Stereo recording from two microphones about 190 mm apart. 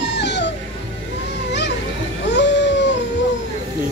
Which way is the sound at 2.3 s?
65° left (ahead or behind).